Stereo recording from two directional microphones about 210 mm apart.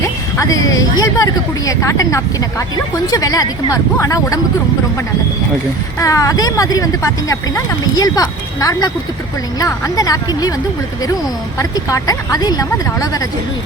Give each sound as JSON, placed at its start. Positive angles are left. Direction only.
{"t": 0.3, "sound": "speech", "side_deg": 15}
{"t": 6.0, "sound": "speech", "side_deg": 15}
{"t": 11.5, "sound": "speech", "side_deg": 15}